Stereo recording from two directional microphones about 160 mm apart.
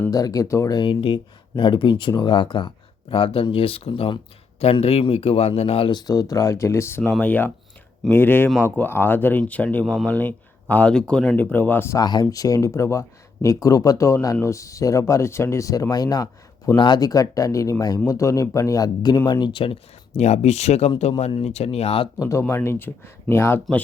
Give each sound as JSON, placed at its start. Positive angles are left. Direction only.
{"t": 0.1, "sound": "speech", "side_deg": 20}
{"t": 22.2, "sound": "speech", "side_deg": 15}